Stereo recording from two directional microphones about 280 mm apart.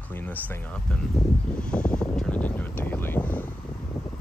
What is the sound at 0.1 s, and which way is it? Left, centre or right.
Speech, centre.